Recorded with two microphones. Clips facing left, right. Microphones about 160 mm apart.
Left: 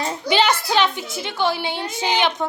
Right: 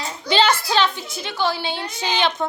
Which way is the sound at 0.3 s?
15° left (ahead or behind).